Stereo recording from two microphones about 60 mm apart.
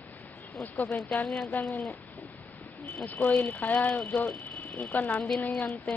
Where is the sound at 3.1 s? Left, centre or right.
Left.